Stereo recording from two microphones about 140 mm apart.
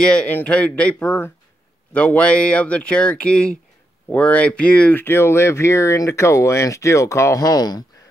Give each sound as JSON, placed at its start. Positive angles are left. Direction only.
{"t": 0.0, "sound": "speech", "side_deg": 5}